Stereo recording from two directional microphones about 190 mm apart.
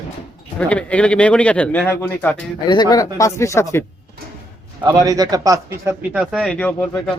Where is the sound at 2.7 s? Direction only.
20° left (ahead or behind).